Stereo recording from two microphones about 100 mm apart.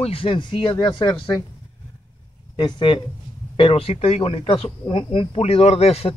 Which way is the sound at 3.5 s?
70° left (ahead or behind).